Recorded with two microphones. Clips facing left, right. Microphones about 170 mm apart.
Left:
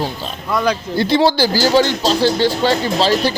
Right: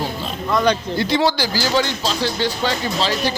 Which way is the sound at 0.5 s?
5° left (ahead or behind).